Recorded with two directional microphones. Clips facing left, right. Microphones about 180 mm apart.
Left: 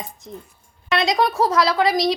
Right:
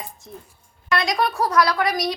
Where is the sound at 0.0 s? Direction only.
20° left (ahead or behind).